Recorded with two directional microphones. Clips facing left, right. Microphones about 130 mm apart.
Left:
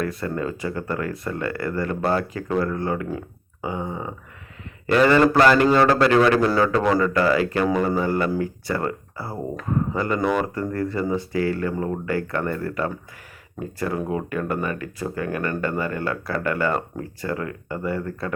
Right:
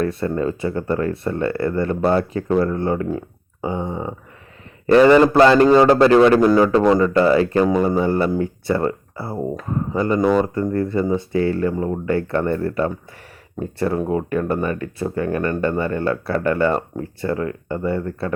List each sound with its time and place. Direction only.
0.0 s speech: 25° right (ahead or behind)